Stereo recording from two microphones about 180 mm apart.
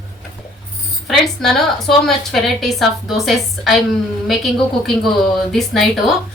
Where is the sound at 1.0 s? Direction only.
Centre (ahead or behind).